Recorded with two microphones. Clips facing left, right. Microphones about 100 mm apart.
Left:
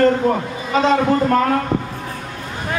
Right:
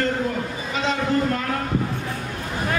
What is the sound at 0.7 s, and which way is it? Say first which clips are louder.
Speech: left 7 dB; 45° left (ahead or behind).